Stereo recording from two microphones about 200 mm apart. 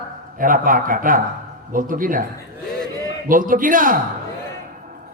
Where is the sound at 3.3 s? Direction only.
45° right (ahead or behind).